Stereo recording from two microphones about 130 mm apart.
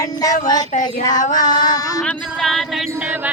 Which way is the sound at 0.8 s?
30° left (ahead or behind).